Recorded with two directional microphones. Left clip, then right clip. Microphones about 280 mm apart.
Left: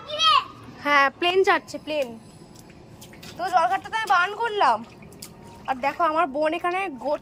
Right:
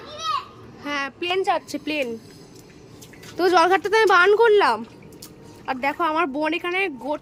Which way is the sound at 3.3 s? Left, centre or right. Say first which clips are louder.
Right 4 dB; centre.